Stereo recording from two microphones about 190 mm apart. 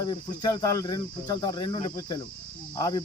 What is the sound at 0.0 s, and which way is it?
Cricket, 20° left (ahead or behind).